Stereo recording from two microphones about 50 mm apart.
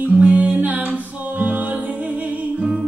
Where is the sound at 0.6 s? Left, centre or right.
Right.